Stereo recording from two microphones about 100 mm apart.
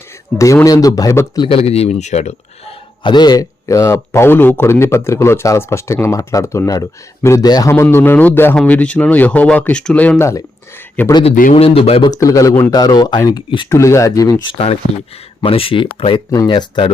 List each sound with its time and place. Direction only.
0.3 s speech: 30° left (ahead or behind)
1.5 s speech: 85° left
3.0 s a man's voice: 50° left (ahead or behind); by 7.4 s 30° left (ahead or behind)
7.4 s a man's voice: 40° left (ahead or behind)
7.7 s a man's voice: 25° left (ahead or behind)
11.2 s speech: 75° left (ahead or behind)
12.2 s speech: 35° left (ahead or behind)
15.4 s speech: 65° left (ahead or behind)